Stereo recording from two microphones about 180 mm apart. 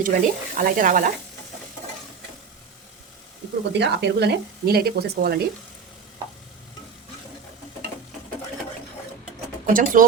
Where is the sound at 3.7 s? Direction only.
70° right (ahead or behind).